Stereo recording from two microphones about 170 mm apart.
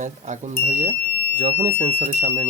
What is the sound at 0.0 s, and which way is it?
Speech, 45° right (ahead or behind).